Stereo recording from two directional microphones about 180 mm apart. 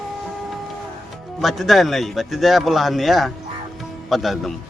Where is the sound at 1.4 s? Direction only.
Centre (ahead or behind).